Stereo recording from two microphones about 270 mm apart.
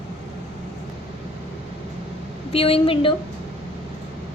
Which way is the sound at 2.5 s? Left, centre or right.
Left.